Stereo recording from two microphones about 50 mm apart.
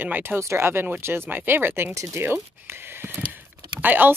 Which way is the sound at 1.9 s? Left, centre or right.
Right.